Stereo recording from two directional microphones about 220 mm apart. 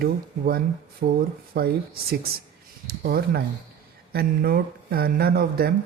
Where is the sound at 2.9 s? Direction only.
45° right (ahead or behind).